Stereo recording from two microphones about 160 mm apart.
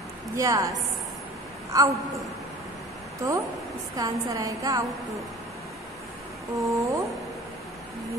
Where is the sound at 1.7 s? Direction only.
20° right (ahead or behind).